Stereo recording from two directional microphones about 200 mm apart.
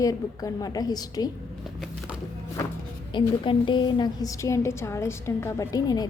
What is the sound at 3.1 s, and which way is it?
A woman's voice, 25° left (ahead or behind).